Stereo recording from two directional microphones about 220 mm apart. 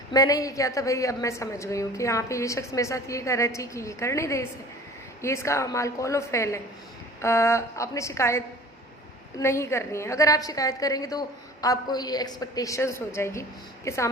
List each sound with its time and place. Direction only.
0.1 s a woman's voice: 15° left (ahead or behind)